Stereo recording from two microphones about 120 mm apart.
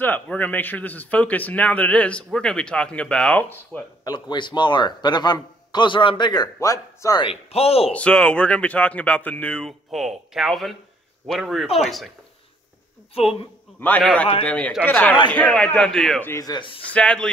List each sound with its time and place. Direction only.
0.0 s speech: 15° left (ahead or behind)
4.0 s a man's voice: 35° left (ahead or behind)
7.2 s speech: 55° left (ahead or behind)
7.9 s speech: 10° left (ahead or behind)
13.1 s speech: 55° left (ahead or behind)
13.7 s speech: 15° left (ahead or behind)
16.2 s speech: 20° left (ahead or behind)
16.4 s a man's voice: 40° left (ahead or behind)
16.9 s speech: 10° left (ahead or behind)